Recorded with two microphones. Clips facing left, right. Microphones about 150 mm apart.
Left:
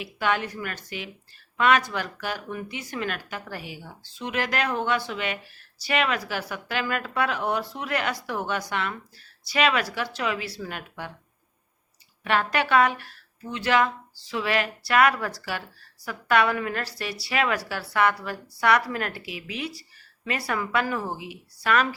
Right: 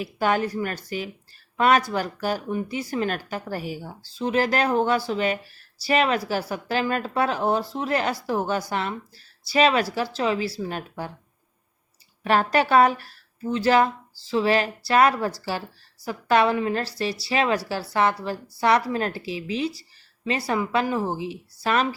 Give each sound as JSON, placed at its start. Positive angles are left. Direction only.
{"t": 0.0, "sound": "speech", "side_deg": -40}
{"t": 12.2, "sound": "a woman's voice", "side_deg": -35}